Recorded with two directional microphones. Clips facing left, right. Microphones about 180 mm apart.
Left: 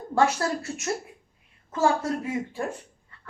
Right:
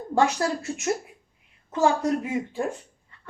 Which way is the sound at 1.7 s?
20° right (ahead or behind).